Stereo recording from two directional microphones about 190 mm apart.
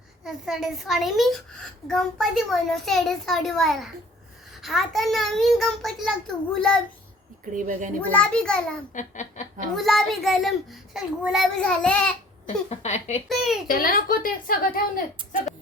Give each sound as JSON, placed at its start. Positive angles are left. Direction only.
{"t": 0.3, "sound": "a child's voice", "side_deg": 0}
{"t": 7.5, "sound": "speech", "side_deg": -45}
{"t": 8.1, "sound": "a child's voice", "side_deg": 5}
{"t": 8.9, "sound": "speech", "side_deg": 40}
{"t": 9.7, "sound": "a child's voice", "side_deg": 0}
{"t": 12.6, "sound": "speech", "side_deg": 35}
{"t": 13.2, "sound": "a child's voice", "side_deg": 0}
{"t": 13.7, "sound": "a woman's voice", "side_deg": 50}
{"t": 15.2, "sound": "speech", "side_deg": -25}